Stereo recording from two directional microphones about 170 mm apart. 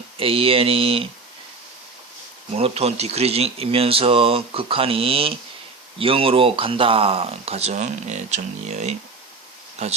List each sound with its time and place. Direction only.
0.2 s speech: 35° right (ahead or behind)
2.6 s speech: 35° right (ahead or behind)